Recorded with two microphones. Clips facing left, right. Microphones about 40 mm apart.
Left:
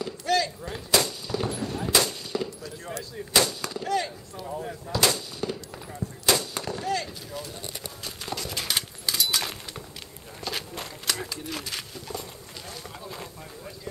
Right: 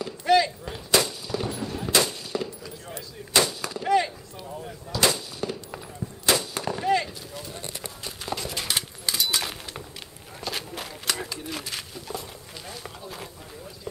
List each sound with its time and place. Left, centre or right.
0.2 s artillery fire: centre
0.7 s gunshot: centre
2.9 s artillery fire: centre
3.8 s speech: centre
4.5 s speech: centre
5.0 s artillery fire: centre
8.0 s horse: centre
10.4 s a sound: centre